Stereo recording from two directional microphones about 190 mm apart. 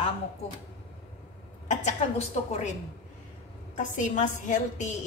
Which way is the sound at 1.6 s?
35° left (ahead or behind).